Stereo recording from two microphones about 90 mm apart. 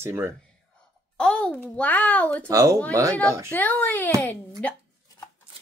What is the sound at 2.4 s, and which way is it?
Speech, 35° right (ahead or behind).